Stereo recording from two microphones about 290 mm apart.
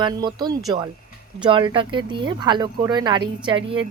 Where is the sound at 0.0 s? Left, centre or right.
Centre.